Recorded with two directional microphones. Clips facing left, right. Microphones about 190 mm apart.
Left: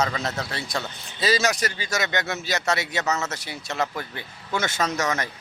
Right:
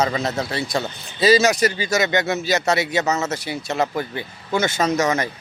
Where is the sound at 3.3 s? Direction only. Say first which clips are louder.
Right 7 dB; 5° right (ahead or behind).